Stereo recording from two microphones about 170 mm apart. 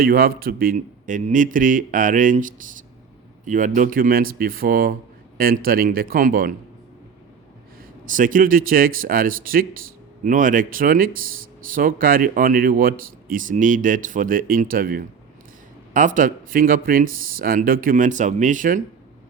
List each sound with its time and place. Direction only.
0.0 s speech: 60° right (ahead or behind)
8.0 s speech: 50° right (ahead or behind)